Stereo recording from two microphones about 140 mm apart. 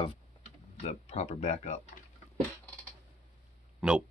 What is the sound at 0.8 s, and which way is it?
Speech, 55° left (ahead or behind).